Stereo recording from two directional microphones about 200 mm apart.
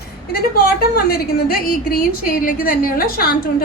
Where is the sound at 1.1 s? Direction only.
45° left (ahead or behind).